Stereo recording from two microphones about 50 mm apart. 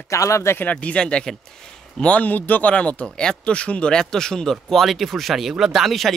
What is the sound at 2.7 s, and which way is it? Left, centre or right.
Speech, left.